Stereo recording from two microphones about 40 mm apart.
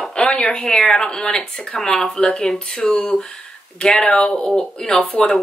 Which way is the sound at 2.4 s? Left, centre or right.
Centre.